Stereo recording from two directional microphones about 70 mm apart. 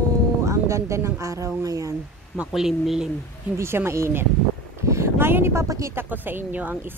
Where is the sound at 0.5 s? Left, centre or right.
Right.